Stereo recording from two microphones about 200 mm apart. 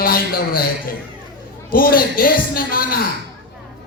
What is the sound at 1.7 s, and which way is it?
A man's voice, 45° left (ahead or behind).